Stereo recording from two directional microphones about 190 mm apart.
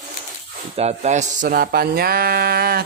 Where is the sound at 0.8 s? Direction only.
35° right (ahead or behind).